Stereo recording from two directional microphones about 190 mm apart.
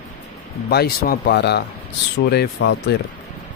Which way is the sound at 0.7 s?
55° left (ahead or behind).